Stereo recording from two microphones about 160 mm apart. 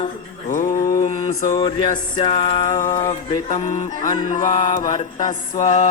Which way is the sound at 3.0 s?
35° left (ahead or behind).